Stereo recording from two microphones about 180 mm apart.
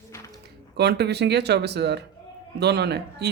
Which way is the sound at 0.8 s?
65° right (ahead or behind).